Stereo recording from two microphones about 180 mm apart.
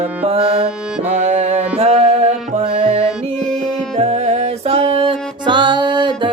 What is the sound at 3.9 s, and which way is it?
Music, 40° right (ahead or behind).